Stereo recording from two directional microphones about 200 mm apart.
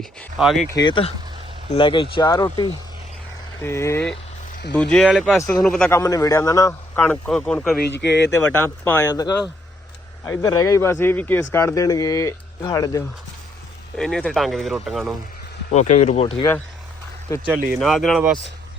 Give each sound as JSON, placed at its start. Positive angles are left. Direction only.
{"t": 0.2, "sound": "speech", "side_deg": 0}
{"t": 0.7, "sound": "a man's voice", "side_deg": 20}
{"t": 6.0, "sound": "a man's voice", "side_deg": 15}
{"t": 7.8, "sound": "speech", "side_deg": 60}
{"t": 8.4, "sound": "a man's voice", "side_deg": 10}
{"t": 13.9, "sound": "speech", "side_deg": 0}
{"t": 15.7, "sound": "speech", "side_deg": 35}
{"t": 17.7, "sound": "speech", "side_deg": 0}